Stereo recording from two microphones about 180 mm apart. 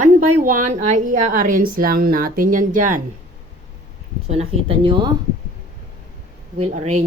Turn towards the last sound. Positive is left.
turn(degrees=-40)  # may be behind; listen again after turning